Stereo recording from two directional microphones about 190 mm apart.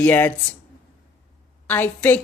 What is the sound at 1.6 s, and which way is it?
Speech, 10° left (ahead or behind).